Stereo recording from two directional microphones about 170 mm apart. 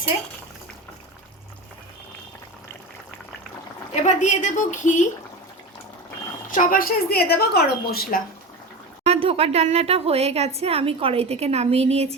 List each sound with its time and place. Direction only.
4.0 s a woman's voice: 45° left (ahead or behind)
6.5 s a woman's voice: 55° left (ahead or behind)
9.0 s a woman's voice: 35° right (ahead or behind)